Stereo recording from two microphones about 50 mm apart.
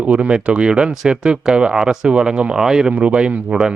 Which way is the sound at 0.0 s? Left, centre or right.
Right.